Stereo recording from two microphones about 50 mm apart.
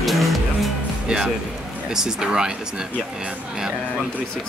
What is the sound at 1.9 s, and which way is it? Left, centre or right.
Speech, centre.